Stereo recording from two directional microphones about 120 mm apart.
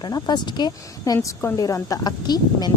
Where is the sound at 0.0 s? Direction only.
35° left (ahead or behind).